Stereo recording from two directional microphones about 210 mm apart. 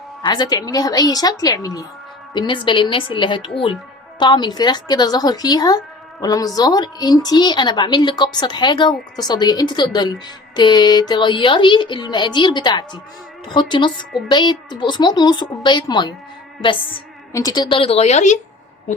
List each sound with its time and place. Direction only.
0.3 s a woman's voice: 20° left (ahead or behind)
17.3 s a woman's voice: 20° left (ahead or behind); by 18.3 s 35° left (ahead or behind)